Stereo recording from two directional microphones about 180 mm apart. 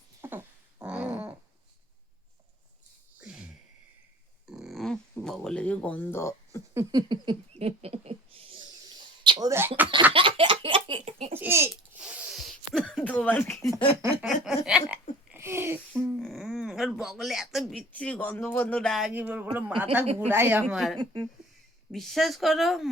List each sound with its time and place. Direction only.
0.2 s dog: 15° right (ahead or behind)
3.2 s a sound: 5° right (ahead or behind)
4.4 s speech: centre (ahead or behind); by 6.6 s 15° left (ahead or behind)
6.7 s speech: 25° right (ahead or behind)
9.2 s speech: 20° right (ahead or behind)
10.1 s a sound: 30° right (ahead or behind)
11.3 s speech: 10° right (ahead or behind); by 13.8 s 15° left (ahead or behind)
14.3 s speech: centre (ahead or behind)
16.1 s speech: centre (ahead or behind)
21.0 s speech: 25° right (ahead or behind)
21.9 s speech: centre (ahead or behind)